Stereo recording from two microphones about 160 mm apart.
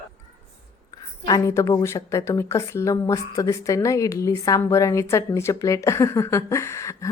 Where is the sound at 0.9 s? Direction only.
25° left (ahead or behind).